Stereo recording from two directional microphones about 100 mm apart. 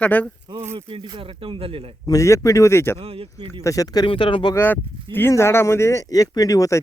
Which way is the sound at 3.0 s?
75° right (ahead or behind).